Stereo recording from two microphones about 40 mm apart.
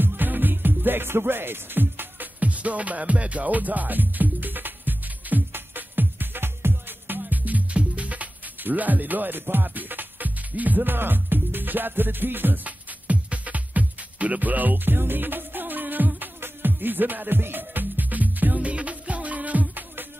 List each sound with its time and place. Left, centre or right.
0.0 s music: right
2.4 s music: right
7.2 s music: right
12.6 s music: right